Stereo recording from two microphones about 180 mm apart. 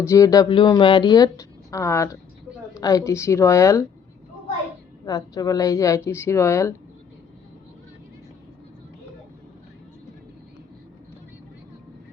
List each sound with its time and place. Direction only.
0.0 s a woman's voice: 15° left (ahead or behind)
5.0 s a woman's voice: 20° left (ahead or behind)